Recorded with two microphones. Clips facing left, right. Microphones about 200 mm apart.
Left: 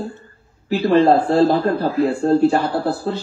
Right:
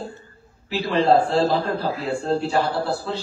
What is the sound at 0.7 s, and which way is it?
A man's voice, 55° left (ahead or behind).